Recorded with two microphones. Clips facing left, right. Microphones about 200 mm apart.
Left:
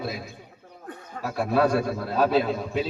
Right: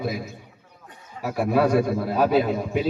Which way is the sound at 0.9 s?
50° left (ahead or behind).